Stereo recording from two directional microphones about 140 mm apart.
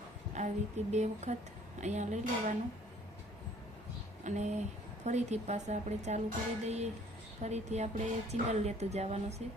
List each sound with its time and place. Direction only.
0.3 s a woman's voice: 55° right (ahead or behind)
4.2 s a woman's voice: 55° right (ahead or behind)